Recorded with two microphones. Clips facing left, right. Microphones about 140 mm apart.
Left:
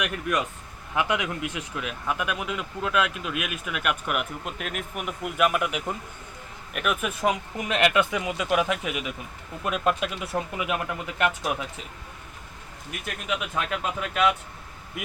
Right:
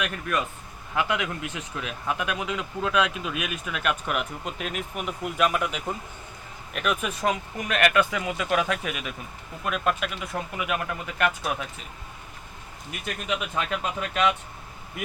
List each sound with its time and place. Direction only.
0.0 s speech: 15° left (ahead or behind)
7.7 s speech: 20° left (ahead or behind)
13.1 s speech: centre (ahead or behind)